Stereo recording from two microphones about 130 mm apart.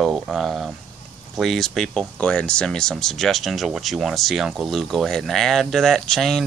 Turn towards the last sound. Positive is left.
turn(degrees=0)  # may be behind; listen again after turning